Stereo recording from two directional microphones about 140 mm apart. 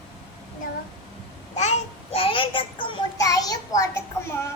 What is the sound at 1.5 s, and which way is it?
Child singing, 55° left (ahead or behind).